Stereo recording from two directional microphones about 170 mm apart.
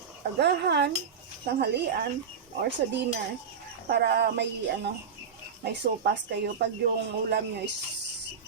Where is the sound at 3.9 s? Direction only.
70° right (ahead or behind); by 6.8 s 90° right.